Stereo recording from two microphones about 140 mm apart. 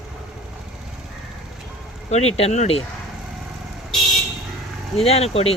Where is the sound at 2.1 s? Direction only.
50° left (ahead or behind).